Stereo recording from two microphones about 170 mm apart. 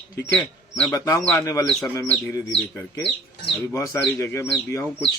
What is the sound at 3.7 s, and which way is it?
Speech, 20° left (ahead or behind).